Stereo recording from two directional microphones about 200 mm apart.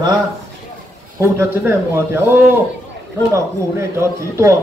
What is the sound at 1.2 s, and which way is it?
A man's voice, 10° right (ahead or behind).